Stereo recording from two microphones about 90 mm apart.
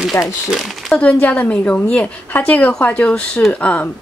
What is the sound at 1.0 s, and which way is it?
A woman's voice, 15° left (ahead or behind).